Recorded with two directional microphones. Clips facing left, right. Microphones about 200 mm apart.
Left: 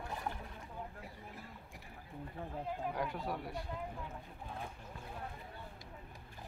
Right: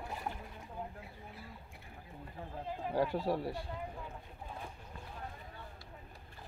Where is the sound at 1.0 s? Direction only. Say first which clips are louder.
Even; 45° left (ahead or behind).